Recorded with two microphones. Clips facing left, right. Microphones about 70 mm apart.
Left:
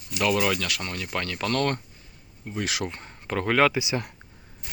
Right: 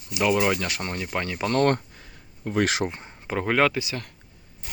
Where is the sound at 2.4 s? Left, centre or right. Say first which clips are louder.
Right 8 dB; right.